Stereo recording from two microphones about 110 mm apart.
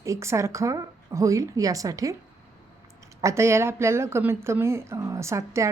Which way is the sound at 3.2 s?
25° right (ahead or behind).